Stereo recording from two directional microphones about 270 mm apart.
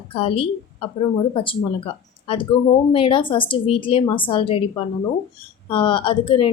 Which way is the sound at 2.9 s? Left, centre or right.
Centre.